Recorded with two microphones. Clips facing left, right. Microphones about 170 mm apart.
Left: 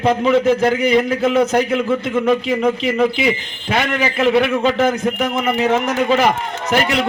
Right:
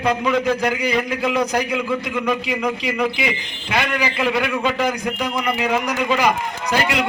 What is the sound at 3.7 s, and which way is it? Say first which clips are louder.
A man's voice: left 3 dB; 25° left (ahead or behind).